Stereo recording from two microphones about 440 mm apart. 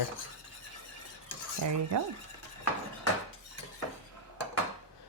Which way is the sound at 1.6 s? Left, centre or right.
Right.